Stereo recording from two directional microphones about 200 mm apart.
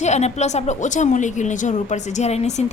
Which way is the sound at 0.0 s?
35° left (ahead or behind).